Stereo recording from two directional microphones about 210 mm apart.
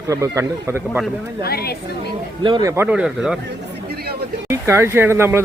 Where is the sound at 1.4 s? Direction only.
50° left (ahead or behind).